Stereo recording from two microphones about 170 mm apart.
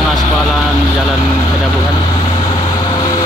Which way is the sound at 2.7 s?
25° left (ahead or behind).